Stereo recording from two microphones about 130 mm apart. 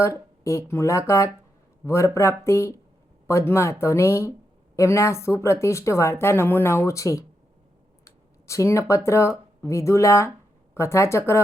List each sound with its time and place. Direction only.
0.4 s a man's voice: 20° left (ahead or behind)
8.0 s a sound: 25° left (ahead or behind)
9.0 s speech: 20° left (ahead or behind)